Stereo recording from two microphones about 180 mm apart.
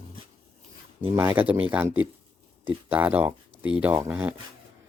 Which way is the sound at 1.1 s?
15° right (ahead or behind).